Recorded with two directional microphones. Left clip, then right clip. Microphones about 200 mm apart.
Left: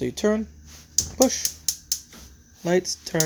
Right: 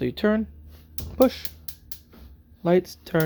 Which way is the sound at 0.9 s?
10° right (ahead or behind).